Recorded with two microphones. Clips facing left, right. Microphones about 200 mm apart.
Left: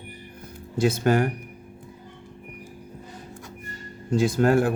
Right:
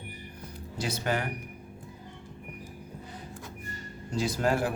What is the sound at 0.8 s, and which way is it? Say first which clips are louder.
Speech: left 10 dB; 50° left (ahead or behind).